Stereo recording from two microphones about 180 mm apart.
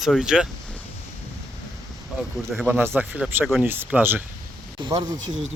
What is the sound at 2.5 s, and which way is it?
Speech, 5° right (ahead or behind).